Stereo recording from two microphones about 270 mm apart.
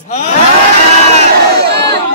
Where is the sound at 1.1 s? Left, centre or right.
Right.